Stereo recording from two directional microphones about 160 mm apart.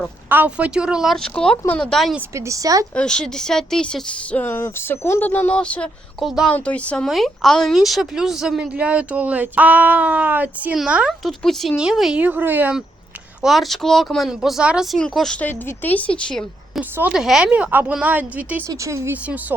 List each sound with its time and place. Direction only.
0.3 s speech: 10° right (ahead or behind)
2.3 s speech: 20° right (ahead or behind)
2.9 s speech: 5° left (ahead or behind); by 12.8 s 10° right (ahead or behind)
13.4 s speech: centre (ahead or behind)